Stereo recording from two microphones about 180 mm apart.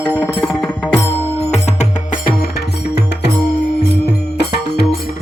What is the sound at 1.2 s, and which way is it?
Music, 35° left (ahead or behind).